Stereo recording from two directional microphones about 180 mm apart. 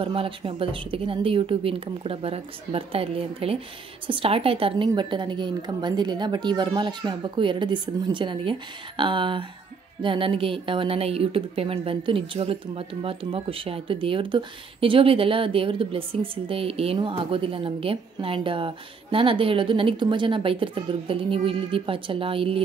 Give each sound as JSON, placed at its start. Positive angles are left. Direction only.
{"t": 0.0, "sound": "a woman's voice", "side_deg": -30}